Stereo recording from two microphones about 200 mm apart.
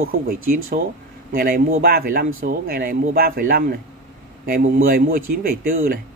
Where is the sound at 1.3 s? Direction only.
50° right (ahead or behind).